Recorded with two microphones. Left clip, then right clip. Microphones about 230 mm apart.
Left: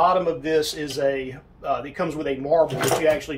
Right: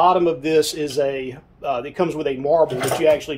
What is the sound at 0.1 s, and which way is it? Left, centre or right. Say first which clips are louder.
Speech: right 4 dB; right.